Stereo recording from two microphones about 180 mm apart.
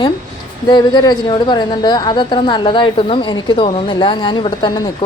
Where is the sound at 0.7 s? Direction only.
25° left (ahead or behind).